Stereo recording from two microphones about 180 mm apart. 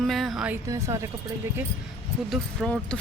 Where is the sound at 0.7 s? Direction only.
15° right (ahead or behind).